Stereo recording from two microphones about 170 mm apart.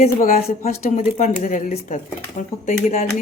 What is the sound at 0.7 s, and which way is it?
A woman's voice, 55° left (ahead or behind).